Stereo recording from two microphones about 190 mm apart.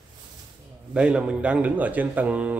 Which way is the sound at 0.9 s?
5° right (ahead or behind).